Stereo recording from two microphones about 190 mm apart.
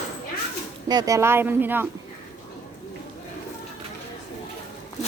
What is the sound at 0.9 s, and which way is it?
Speech, 20° right (ahead or behind).